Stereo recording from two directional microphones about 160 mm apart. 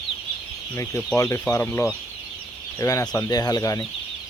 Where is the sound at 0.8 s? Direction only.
20° left (ahead or behind).